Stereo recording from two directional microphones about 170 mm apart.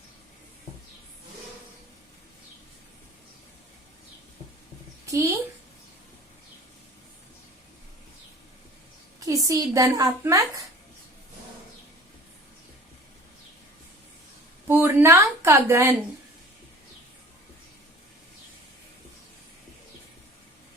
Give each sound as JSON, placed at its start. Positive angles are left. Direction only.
{"t": 5.0, "sound": "a child's voice", "side_deg": -20}
{"t": 9.2, "sound": "a woman's voice", "side_deg": -20}
{"t": 14.7, "sound": "speech", "side_deg": -10}